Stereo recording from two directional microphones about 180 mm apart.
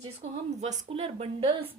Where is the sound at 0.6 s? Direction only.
40° right (ahead or behind).